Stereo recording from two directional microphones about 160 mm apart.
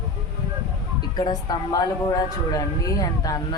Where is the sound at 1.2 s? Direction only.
25° left (ahead or behind).